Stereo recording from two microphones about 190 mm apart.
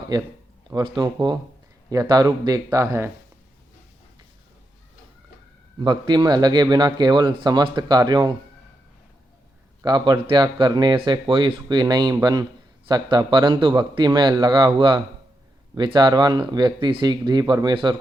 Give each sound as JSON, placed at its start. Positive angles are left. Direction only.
{"t": 0.1, "sound": "speech", "side_deg": -20}
{"t": 5.8, "sound": "speech", "side_deg": -25}
{"t": 9.8, "sound": "speech", "side_deg": -25}